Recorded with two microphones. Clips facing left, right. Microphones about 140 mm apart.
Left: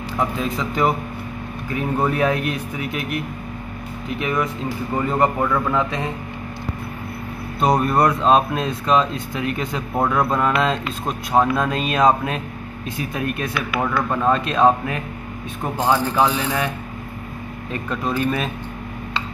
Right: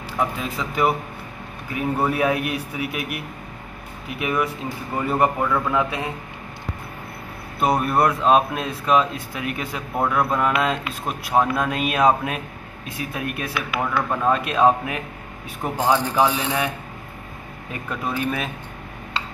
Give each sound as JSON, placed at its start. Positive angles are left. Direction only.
{"t": 0.4, "sound": "speech", "side_deg": -5}
{"t": 7.6, "sound": "speech", "side_deg": -5}
{"t": 17.8, "sound": "speech", "side_deg": -5}